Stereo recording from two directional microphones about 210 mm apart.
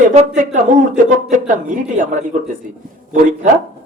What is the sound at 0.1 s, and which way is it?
Speech, 35° right (ahead or behind).